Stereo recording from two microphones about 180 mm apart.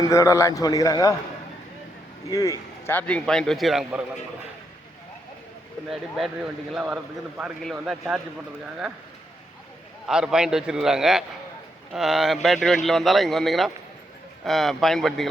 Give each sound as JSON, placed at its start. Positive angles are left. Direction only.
{"t": 0.0, "sound": "a man's voice", "side_deg": 20}
{"t": 2.3, "sound": "speech", "side_deg": 20}
{"t": 5.9, "sound": "speech", "side_deg": 0}
{"t": 10.1, "sound": "speech", "side_deg": -5}